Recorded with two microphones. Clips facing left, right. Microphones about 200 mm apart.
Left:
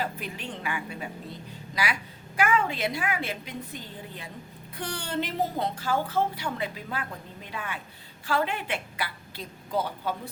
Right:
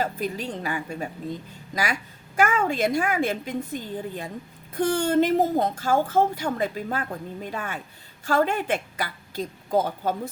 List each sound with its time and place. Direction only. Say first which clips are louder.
0.0 s a woman's voice: right 6 dB; 40° right (ahead or behind)